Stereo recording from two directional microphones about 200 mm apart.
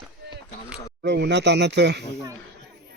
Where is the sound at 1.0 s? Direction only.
55° right (ahead or behind).